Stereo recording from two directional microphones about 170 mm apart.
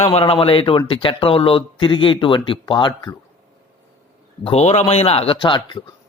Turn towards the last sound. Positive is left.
turn(degrees=25)  # may be behind; listen again after turning